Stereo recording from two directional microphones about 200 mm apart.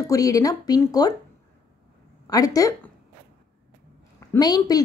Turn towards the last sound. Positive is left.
turn(degrees=20)  # may be behind; listen again after turning